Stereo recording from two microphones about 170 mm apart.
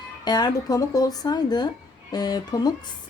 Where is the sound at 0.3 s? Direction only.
25° left (ahead or behind).